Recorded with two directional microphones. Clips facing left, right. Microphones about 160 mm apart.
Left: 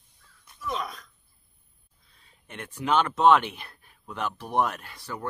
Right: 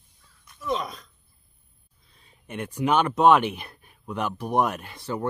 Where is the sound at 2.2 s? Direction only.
15° right (ahead or behind).